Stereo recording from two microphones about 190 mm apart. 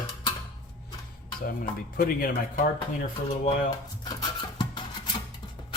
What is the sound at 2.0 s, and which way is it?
Speech, 50° left (ahead or behind).